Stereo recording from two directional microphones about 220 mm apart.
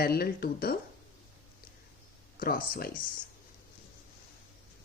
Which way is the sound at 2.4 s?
40° left (ahead or behind).